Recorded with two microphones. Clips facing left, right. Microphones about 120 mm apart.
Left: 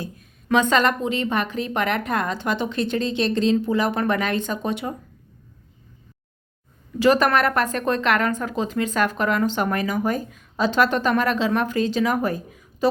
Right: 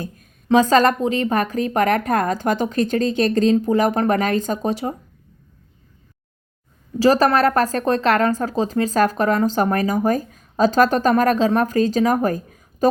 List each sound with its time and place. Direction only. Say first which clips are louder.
0.4 s a woman's voice: right 4 dB; 35° right (ahead or behind)
7.0 s a woman's voice: right 3 dB; 35° right (ahead or behind)